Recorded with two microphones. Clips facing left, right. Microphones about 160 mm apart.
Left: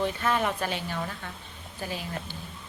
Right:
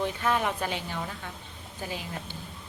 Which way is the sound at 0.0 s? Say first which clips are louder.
Left 1 dB; 15° right (ahead or behind).